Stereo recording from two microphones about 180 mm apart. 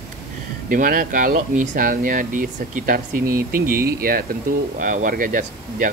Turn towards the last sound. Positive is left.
turn(degrees=-50)  # may be behind; listen again after turning